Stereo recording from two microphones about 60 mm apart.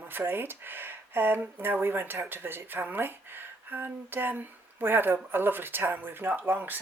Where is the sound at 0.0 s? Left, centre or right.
Right.